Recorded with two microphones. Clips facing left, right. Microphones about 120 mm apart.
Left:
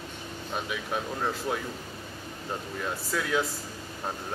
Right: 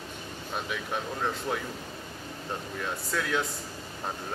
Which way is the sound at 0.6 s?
Centre (ahead or behind).